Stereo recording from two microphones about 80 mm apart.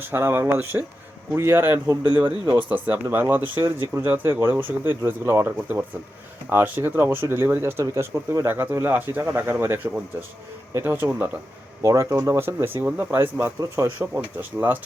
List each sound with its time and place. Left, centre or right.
0.0 s speech: right
2.2 s speech: right
2.6 s speech: right
11.8 s speech: right